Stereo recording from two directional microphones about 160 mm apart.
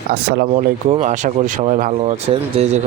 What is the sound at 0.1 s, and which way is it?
Speech, 90° right.